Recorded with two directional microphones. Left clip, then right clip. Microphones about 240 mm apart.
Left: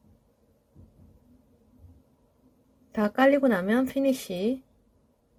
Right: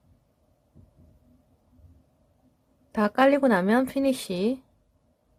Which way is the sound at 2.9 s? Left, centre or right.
Centre.